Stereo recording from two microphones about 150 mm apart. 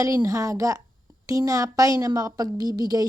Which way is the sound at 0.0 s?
25° right (ahead or behind).